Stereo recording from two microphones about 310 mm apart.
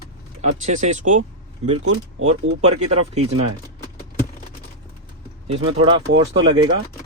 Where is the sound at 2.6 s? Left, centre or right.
Right.